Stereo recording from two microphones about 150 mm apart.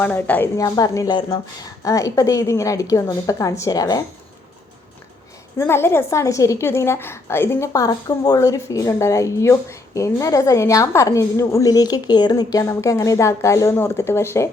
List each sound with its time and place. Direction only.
0.0 s a woman's voice: 10° left (ahead or behind)
5.5 s a woman's voice: 15° left (ahead or behind)